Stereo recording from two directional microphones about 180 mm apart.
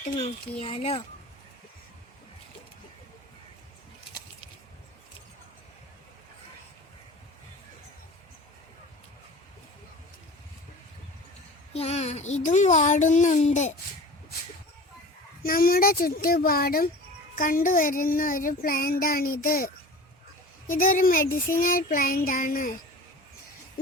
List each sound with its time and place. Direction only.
0.0 s a child's voice: 35° left (ahead or behind)
11.7 s a child's voice: 35° left (ahead or behind)
15.4 s speech: 55° left (ahead or behind)
17.3 s child singing: 50° left (ahead or behind)
20.7 s child singing: 50° left (ahead or behind)